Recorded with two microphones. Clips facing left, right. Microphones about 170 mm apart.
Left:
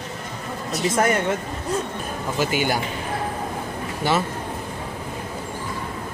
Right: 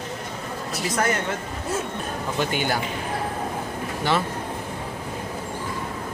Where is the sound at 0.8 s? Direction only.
25° left (ahead or behind).